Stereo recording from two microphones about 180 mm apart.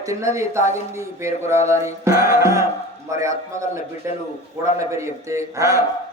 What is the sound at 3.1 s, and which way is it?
Speech, 15° right (ahead or behind).